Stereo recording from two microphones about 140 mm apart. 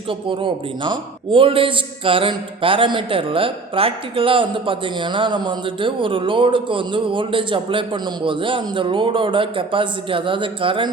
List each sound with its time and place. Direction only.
0.1 s a man's voice: 35° right (ahead or behind)